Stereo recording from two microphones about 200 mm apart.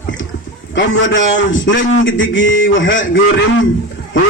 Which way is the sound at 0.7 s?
70° left (ahead or behind).